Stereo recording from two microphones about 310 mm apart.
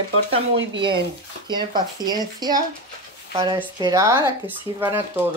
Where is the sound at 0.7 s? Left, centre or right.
Centre.